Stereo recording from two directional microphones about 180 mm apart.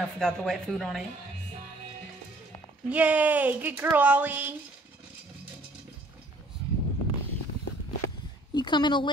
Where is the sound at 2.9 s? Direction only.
10° right (ahead or behind).